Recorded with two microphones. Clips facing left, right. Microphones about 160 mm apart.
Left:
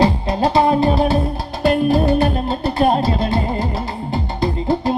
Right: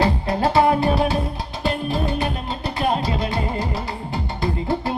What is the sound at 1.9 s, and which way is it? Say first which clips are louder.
Music: left 8 dB; 40° left (ahead or behind).